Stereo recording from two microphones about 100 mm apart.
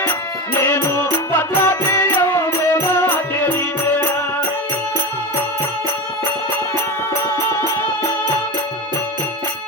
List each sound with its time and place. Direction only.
0.6 s music: 20° left (ahead or behind)